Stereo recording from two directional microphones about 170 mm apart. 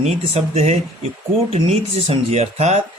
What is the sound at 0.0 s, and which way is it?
A man's voice, 40° right (ahead or behind).